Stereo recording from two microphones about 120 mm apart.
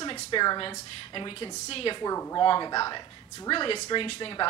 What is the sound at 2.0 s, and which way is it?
Speech, 25° left (ahead or behind).